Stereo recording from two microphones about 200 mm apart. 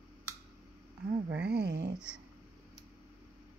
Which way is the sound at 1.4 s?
55° right (ahead or behind).